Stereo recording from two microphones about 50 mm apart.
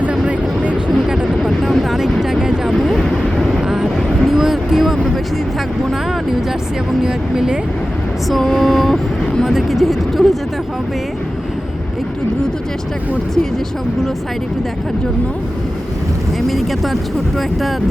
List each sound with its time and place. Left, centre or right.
0.0 s a sound: right
0.9 s vehicle: centre
1.4 s vehicle: centre
2.7 s vehicle: centre
7.0 s speech: centre
8.3 s a sound: centre
9.4 s speech: centre
16.5 s speech: centre